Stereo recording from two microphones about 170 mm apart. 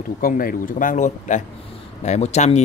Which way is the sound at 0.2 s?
55° left (ahead or behind).